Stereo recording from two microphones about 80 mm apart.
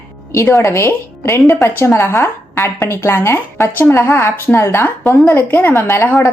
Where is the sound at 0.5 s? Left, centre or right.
Left.